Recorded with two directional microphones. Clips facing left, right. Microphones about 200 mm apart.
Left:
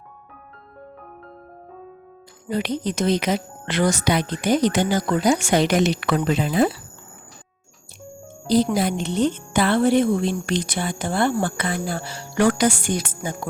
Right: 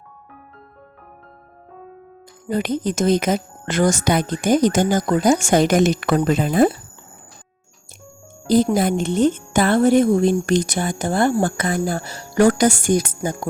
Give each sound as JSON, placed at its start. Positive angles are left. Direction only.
{"t": 2.5, "sound": "speech", "side_deg": -45}
{"t": 8.4, "sound": "speech", "side_deg": -50}